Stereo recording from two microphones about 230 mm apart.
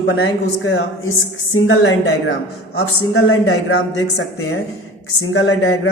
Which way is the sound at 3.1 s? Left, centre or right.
Left.